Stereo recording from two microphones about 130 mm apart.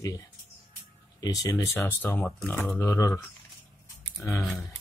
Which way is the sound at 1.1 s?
30° left (ahead or behind).